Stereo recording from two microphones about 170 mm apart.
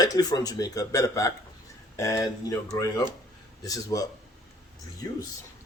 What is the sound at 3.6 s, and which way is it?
Speech, 20° left (ahead or behind).